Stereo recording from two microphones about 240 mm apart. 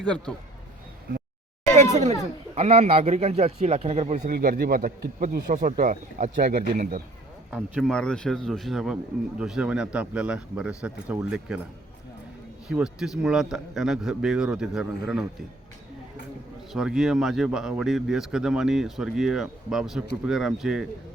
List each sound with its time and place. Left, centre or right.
0.0 s speech: centre
1.7 s a man's voice: right
7.5 s speech: centre
12.6 s speech: centre
16.7 s speech: centre